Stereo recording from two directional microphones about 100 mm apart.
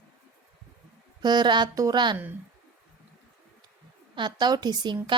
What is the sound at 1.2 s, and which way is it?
Speech, 45° right (ahead or behind).